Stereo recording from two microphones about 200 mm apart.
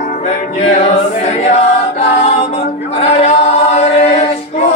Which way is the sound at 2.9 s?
30° left (ahead or behind).